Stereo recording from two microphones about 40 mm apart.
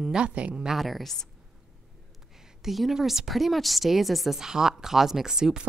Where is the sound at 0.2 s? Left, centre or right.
Right.